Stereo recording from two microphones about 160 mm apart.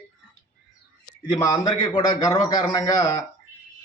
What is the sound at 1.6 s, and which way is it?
A man's voice, 25° left (ahead or behind).